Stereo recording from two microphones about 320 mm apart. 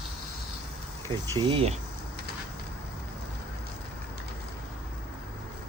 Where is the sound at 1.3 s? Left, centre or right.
Centre.